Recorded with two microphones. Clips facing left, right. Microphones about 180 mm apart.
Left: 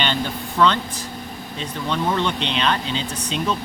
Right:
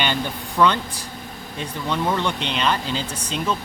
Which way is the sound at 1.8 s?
10° right (ahead or behind).